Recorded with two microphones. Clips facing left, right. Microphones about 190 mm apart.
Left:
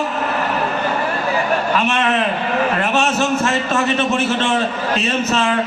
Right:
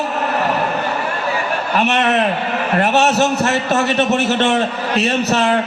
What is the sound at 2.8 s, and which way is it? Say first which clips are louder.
A man's voice: right 3 dB; 70° right (ahead or behind).